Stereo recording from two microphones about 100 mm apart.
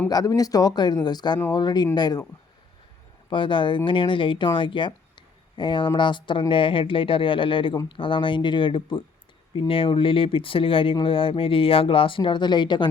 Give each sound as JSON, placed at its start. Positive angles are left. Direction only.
{"t": 0.1, "sound": "speech", "side_deg": 40}
{"t": 3.2, "sound": "speech", "side_deg": 55}